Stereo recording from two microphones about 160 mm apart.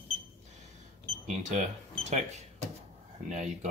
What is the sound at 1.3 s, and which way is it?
Speech, 50° right (ahead or behind).